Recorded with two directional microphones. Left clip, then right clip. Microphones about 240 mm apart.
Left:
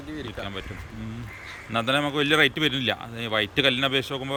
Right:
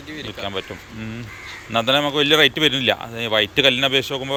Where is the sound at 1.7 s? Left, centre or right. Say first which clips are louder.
Right 6 dB; centre.